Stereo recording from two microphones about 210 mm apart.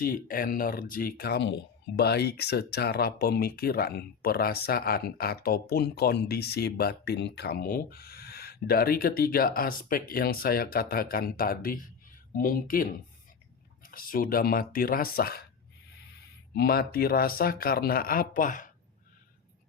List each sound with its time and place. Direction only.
0.0 s speech: 45° left (ahead or behind)
16.6 s speech: 45° left (ahead or behind)